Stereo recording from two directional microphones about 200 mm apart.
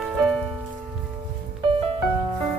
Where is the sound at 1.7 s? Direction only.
30° right (ahead or behind).